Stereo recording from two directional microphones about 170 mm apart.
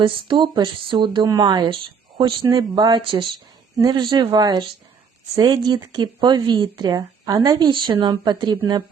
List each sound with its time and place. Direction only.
0.0 s speech: 30° right (ahead or behind)